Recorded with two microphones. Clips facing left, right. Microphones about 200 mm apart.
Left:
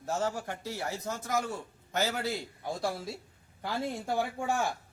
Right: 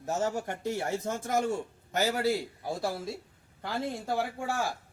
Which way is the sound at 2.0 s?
15° right (ahead or behind).